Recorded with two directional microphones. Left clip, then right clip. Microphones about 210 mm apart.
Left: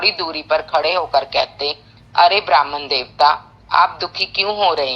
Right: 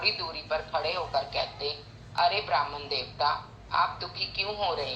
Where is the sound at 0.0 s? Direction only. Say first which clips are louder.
Left 11 dB; 50° left (ahead or behind).